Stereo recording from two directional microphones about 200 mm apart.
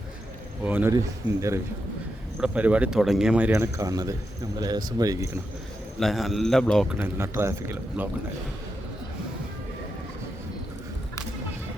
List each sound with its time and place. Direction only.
0.6 s speech: 10° right (ahead or behind)
6.0 s a man's voice: centre (ahead or behind)
7.0 s speech: 15° right (ahead or behind)